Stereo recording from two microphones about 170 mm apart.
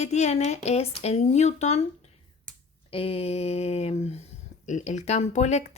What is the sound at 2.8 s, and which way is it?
Speech, 35° left (ahead or behind).